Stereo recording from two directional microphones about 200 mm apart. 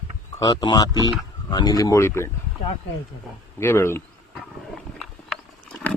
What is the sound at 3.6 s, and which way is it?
Speech, 10° left (ahead or behind).